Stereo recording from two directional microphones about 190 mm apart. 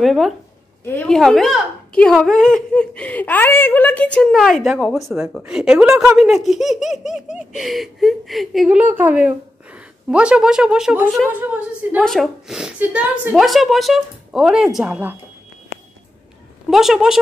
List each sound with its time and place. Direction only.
0.0 s speech: centre (ahead or behind)
16.7 s speech: centre (ahead or behind)